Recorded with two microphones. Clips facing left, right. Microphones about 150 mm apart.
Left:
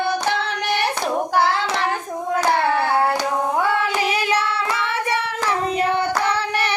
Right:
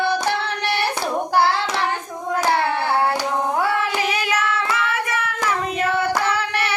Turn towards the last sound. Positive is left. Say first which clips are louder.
# left 2 dB
turn(degrees=35)  # may be behind; listen again after turning